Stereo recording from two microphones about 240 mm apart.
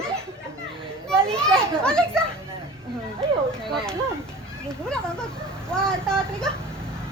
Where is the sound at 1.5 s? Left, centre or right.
Centre.